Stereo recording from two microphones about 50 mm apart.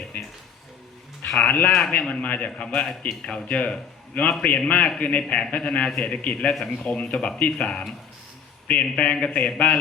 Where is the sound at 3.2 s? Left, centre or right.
Centre.